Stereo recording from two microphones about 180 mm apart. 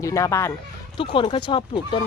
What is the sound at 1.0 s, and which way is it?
Speech, 30° left (ahead or behind).